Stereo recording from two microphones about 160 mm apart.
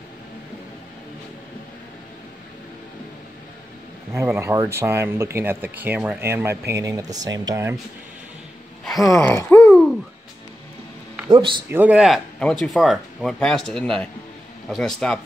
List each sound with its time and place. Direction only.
4.1 s speech: 15° right (ahead or behind)
9.0 s gasp: 20° left (ahead or behind)
11.2 s speech: 30° right (ahead or behind)
11.7 s speech: 10° right (ahead or behind)